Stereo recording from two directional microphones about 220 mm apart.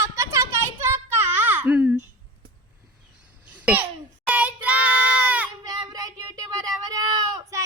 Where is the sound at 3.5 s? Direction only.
5° right (ahead or behind).